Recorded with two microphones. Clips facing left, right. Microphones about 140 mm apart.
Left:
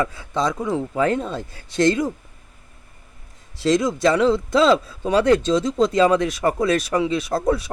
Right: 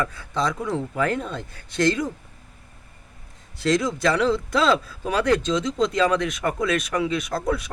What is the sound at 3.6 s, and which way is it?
A man's voice, 20° left (ahead or behind).